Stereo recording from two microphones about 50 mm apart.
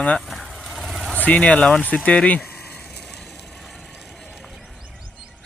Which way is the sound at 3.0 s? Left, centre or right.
Centre.